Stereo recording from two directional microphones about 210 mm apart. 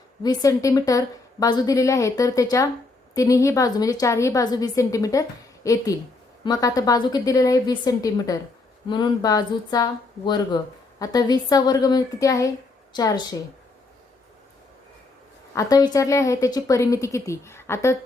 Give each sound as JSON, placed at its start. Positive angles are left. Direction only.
{"t": 0.2, "sound": "a woman's voice", "side_deg": 15}
{"t": 15.5, "sound": "a woman's voice", "side_deg": 20}